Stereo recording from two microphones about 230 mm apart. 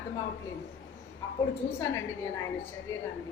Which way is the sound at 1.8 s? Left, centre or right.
Centre.